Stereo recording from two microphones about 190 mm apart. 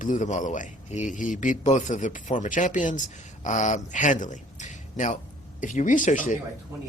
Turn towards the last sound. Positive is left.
turn(degrees=40)  # may be behind; listen again after turning